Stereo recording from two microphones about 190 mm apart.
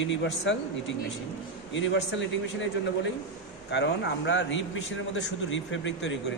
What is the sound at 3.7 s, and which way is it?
A man's voice, 65° left (ahead or behind).